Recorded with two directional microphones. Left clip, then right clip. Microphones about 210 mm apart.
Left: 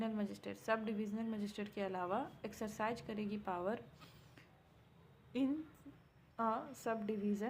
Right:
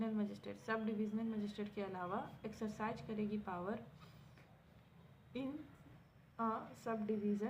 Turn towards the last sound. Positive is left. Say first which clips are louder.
# even
turn(degrees=50)  # may be behind; listen again after turning